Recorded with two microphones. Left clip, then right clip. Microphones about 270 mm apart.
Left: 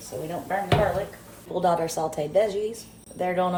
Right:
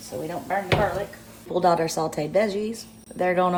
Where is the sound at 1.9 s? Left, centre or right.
Right.